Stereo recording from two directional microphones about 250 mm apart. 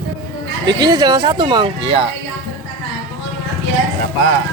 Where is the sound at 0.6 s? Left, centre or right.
Centre.